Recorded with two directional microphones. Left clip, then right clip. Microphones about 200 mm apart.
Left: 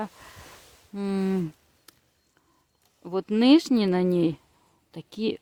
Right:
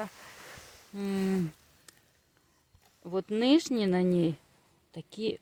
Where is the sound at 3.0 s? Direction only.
50° left (ahead or behind).